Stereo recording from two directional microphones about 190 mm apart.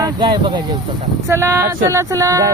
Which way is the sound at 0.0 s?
25° right (ahead or behind).